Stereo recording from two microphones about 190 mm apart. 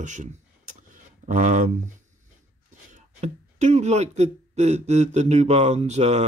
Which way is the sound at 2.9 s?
35° right (ahead or behind).